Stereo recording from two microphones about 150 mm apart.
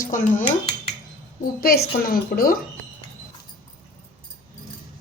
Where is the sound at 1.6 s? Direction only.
90° left.